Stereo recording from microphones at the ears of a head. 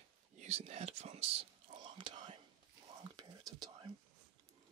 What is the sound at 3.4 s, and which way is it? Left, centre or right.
Whispering, right.